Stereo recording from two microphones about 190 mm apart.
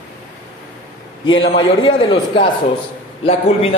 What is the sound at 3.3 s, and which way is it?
Speech, 30° left (ahead or behind).